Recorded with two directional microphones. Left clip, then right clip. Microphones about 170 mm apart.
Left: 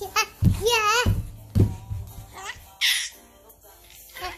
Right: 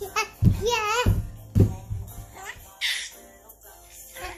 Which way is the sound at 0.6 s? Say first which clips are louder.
Left 3 dB; 20° left (ahead or behind).